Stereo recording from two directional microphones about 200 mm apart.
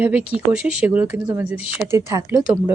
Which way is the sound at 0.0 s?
5° right (ahead or behind).